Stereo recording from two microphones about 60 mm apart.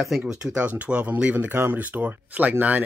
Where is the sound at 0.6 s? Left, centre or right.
Right.